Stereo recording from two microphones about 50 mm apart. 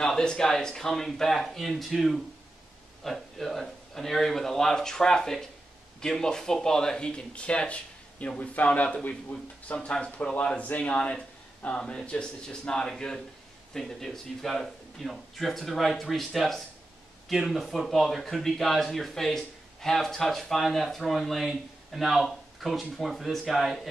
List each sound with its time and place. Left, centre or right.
0.0 s speech: centre; by 9.8 s left
9.8 s speech: centre
10.6 s speech: left; by 23.9 s centre